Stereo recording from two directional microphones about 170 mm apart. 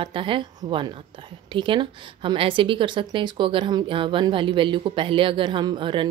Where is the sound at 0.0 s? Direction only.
30° right (ahead or behind).